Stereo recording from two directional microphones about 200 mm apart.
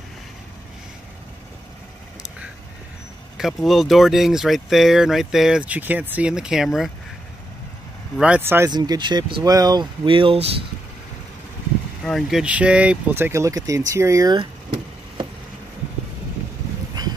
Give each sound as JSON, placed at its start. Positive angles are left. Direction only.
{"t": 3.3, "sound": "speech", "side_deg": 0}
{"t": 8.2, "sound": "speech", "side_deg": -10}
{"t": 12.0, "sound": "speech", "side_deg": 0}
{"t": 17.0, "sound": "a sound", "side_deg": -20}